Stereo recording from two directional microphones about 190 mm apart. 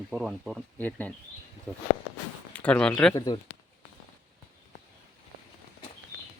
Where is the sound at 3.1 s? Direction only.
20° left (ahead or behind).